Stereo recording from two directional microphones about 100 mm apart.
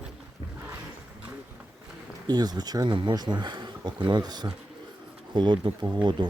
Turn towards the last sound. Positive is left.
turn(degrees=-50)  # may be behind; listen again after turning